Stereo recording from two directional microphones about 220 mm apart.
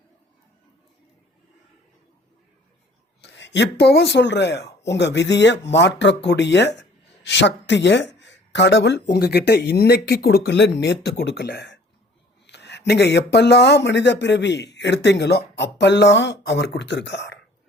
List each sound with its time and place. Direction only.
3.2 s speech: 55° left (ahead or behind)